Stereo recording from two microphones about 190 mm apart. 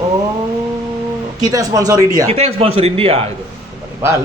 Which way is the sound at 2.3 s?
30° right (ahead or behind).